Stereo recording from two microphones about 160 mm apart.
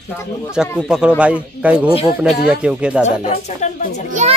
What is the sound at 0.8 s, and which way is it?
Speech, 5° right (ahead or behind).